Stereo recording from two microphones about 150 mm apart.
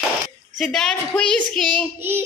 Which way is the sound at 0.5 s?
5° left (ahead or behind).